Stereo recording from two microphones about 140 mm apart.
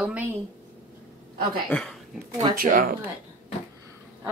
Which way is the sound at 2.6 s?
90° right.